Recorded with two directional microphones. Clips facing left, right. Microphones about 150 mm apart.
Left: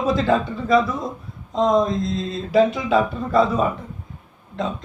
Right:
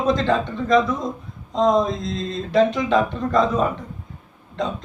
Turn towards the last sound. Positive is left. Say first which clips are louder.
# even
turn(degrees=0)  # may be behind; listen again after turning